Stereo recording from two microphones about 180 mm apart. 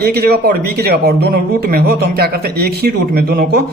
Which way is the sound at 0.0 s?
60° right (ahead or behind).